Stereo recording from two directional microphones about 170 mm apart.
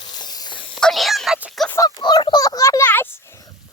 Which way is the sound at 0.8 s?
Centre (ahead or behind).